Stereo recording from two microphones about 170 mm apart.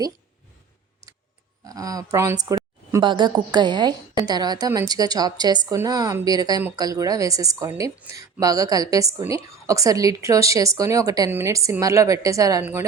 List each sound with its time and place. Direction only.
1.6 s a woman's voice: 20° right (ahead or behind)